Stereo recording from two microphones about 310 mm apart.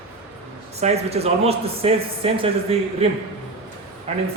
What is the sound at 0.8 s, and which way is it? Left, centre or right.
Speech, centre.